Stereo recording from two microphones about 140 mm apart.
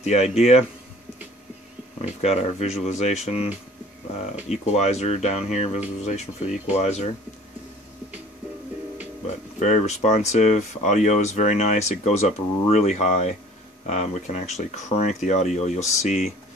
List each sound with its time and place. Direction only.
0.0 s speech: 50° left (ahead or behind)
2.0 s speech: 50° left (ahead or behind)
9.6 s speech: 55° left (ahead or behind)